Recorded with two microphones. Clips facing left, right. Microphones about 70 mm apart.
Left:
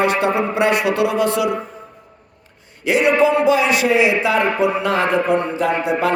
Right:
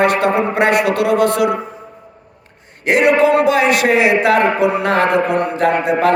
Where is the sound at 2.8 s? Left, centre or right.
Right.